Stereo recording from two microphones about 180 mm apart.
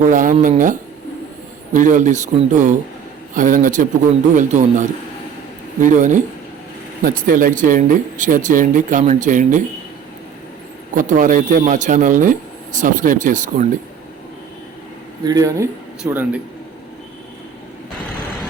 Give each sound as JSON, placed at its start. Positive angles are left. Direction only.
{"t": 0.0, "sound": "speech", "side_deg": -50}
{"t": 10.9, "sound": "speech", "side_deg": -45}
{"t": 15.2, "sound": "speech", "side_deg": -20}